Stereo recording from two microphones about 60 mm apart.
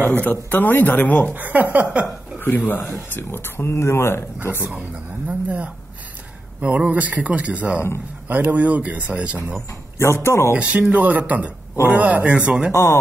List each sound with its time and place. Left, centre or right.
0.0 s speech: left
1.3 s speech: right
2.4 s speech: left
6.6 s speech: right
9.9 s speech: left
10.6 s speech: right